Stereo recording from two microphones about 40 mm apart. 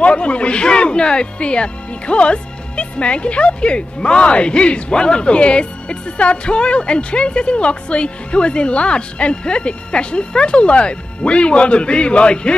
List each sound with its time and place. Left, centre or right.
0.0 s speech: left